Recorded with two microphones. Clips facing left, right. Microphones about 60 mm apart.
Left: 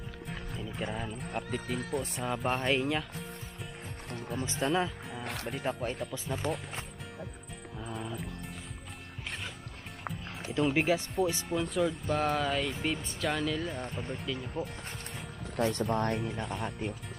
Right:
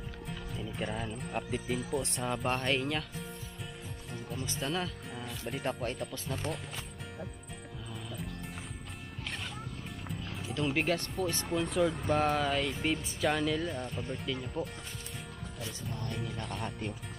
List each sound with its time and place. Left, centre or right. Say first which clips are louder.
0.6 s speech: even; centre
4.6 s speech: left 6 dB; left
5.2 s speech: left 4 dB; left
5.5 s speech: even; centre
10.5 s speech: left 3 dB; centre
15.5 s speech: left 14 dB; left
16.2 s speech: left 3 dB; centre